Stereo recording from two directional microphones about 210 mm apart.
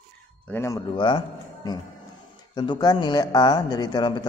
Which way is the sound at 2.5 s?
20° left (ahead or behind).